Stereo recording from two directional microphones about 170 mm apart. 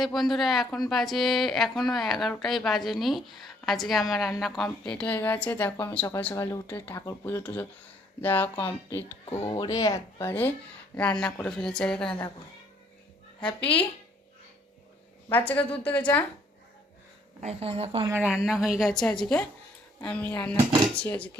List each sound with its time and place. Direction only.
0.0 s speech: centre (ahead or behind)
15.3 s speech: 10° left (ahead or behind)
17.4 s speech: 35° right (ahead or behind)
18.1 s speech: 5° right (ahead or behind)